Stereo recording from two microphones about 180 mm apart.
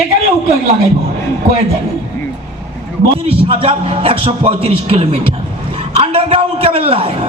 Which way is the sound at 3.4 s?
30° right (ahead or behind).